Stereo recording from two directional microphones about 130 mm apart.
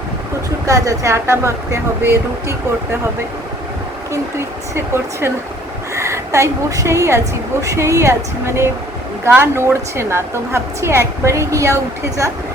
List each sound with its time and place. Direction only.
0.7 s a woman's voice: 25° right (ahead or behind)
4.1 s a woman's voice: 20° right (ahead or behind)
5.9 s a woman's voice: 20° right (ahead or behind)